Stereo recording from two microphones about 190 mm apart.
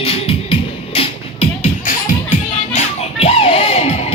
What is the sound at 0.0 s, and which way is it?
Music, 30° left (ahead or behind).